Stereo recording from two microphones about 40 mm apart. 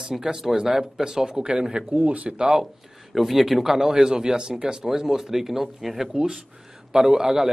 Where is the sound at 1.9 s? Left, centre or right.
Right.